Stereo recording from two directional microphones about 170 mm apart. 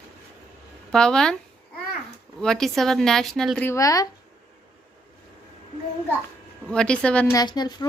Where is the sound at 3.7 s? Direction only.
20° left (ahead or behind).